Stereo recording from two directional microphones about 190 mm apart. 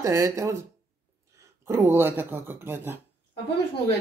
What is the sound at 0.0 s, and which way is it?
Speech, 15° right (ahead or behind).